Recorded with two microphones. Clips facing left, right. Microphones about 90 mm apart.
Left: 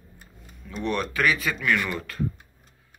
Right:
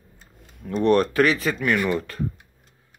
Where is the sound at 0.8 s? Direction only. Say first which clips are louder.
Right 9 dB; 40° right (ahead or behind).